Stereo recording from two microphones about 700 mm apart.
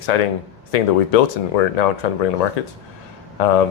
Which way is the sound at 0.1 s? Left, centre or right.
Left.